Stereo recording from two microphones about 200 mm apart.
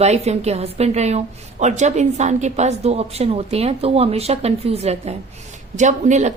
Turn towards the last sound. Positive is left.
turn(degrees=-35)  # may be behind; listen again after turning